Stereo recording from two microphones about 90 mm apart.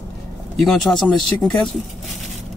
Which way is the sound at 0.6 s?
5° left (ahead or behind).